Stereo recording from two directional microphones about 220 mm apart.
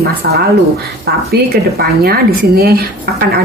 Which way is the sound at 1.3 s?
45° right (ahead or behind).